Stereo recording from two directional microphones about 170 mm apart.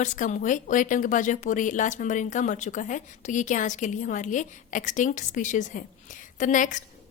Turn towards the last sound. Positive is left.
turn(degrees=50)  # may be behind; listen again after turning